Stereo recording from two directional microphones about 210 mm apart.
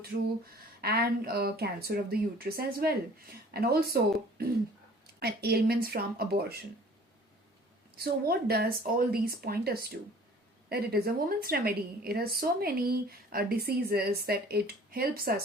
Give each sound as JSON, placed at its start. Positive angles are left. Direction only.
{"t": 0.8, "sound": "a woman's voice", "side_deg": -45}
{"t": 5.2, "sound": "a woman's voice", "side_deg": -50}
{"t": 7.9, "sound": "a woman's voice", "side_deg": -50}